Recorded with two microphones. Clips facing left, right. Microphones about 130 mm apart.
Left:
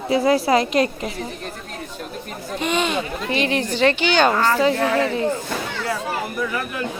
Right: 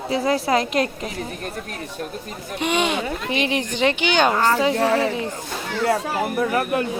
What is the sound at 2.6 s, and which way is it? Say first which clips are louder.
Speech: even; 15° right (ahead or behind).